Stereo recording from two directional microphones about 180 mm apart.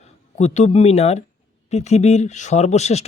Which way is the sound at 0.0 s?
40° left (ahead or behind).